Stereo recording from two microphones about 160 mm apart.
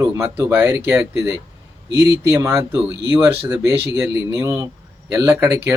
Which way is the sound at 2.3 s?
15° right (ahead or behind).